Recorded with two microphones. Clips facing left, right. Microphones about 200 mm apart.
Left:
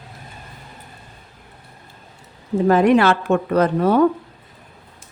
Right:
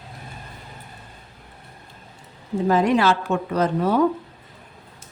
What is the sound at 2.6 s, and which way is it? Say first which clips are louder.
A woman's voice: left 4 dB; 60° left (ahead or behind).